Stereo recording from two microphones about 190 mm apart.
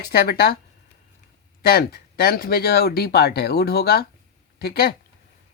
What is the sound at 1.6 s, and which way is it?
Speech, 50° left (ahead or behind).